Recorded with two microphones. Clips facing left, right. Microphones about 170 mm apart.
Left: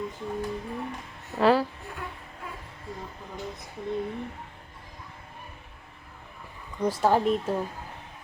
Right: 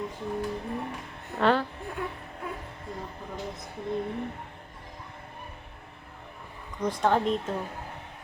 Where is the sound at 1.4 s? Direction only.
5° left (ahead or behind).